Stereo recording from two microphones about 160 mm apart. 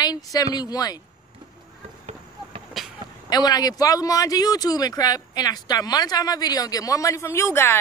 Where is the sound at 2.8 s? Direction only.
Centre (ahead or behind).